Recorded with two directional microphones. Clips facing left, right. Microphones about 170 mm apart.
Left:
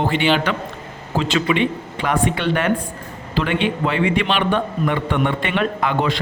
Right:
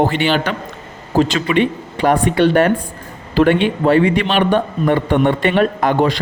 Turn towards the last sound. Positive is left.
turn(degrees=-40)  # may be behind; listen again after turning